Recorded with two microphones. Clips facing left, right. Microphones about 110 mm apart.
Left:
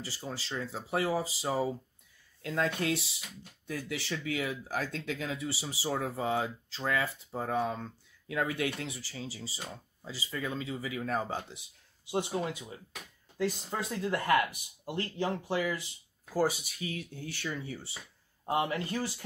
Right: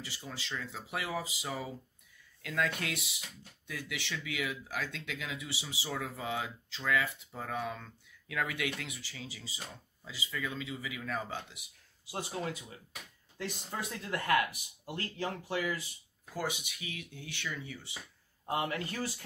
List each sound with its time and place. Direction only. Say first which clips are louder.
0.0 s speech: left 4 dB; 35° left (ahead or behind)
16.3 s speech: left 8 dB; 35° left (ahead or behind)
18.4 s speech: left 3 dB; 25° left (ahead or behind)